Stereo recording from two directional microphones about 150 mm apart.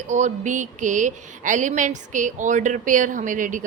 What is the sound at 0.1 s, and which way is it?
A woman's voice, 55° right (ahead or behind).